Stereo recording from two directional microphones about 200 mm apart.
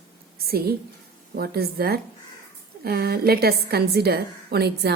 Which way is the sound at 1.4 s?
50° right (ahead or behind).